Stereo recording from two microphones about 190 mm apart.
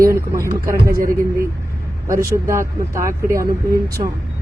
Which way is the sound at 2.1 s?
15° right (ahead or behind).